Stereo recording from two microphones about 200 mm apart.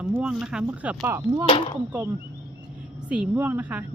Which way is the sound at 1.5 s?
25° left (ahead or behind).